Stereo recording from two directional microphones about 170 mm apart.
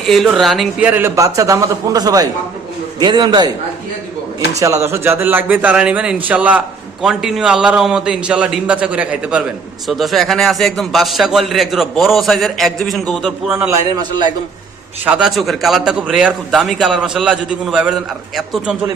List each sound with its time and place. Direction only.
0.0 s a man's voice: centre (ahead or behind); by 3.5 s 25° right (ahead or behind)
4.6 s a man's voice: 15° right (ahead or behind); by 13.3 s centre (ahead or behind)
13.5 s a man's voice: 15° right (ahead or behind)
15.0 s a man's voice: 5° right (ahead or behind)